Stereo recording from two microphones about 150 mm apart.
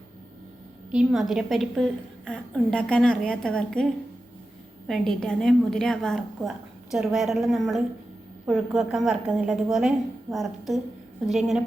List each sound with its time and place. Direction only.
0.9 s a woman's voice: 5° right (ahead or behind)
11.3 s a woman's voice: centre (ahead or behind)